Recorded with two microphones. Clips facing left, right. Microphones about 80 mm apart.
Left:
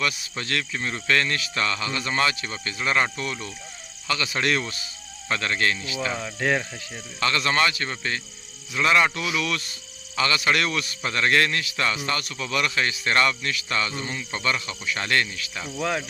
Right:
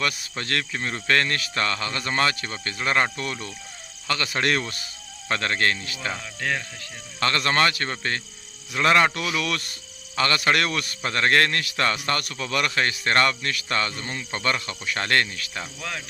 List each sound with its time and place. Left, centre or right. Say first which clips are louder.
0.0 s a man's voice: even; right
6.1 s speech: left 5 dB; centre
7.2 s a man's voice: right 1 dB; right
15.8 s speech: left 10 dB; centre